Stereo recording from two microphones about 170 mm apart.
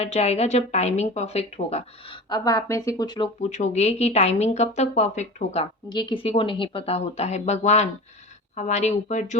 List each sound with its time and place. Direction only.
0.0 s a woman's voice: 40° left (ahead or behind)
2.3 s speech: 20° left (ahead or behind)
3.5 s a woman's voice: 45° left (ahead or behind)
5.9 s a woman's voice: 25° left (ahead or behind); by 9.3 s 45° left (ahead or behind)